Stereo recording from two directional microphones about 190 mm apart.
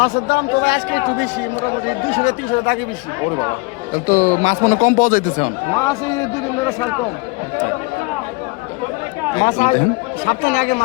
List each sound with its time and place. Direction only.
0.0 s a man's voice: 55° left (ahead or behind)
2.1 s speech: 35° left (ahead or behind)
3.9 s speech: 45° left (ahead or behind)
5.8 s a man's voice: 20° left (ahead or behind)
9.4 s speech: 40° left (ahead or behind)